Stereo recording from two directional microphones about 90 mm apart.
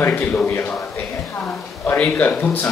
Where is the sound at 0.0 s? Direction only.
20° left (ahead or behind).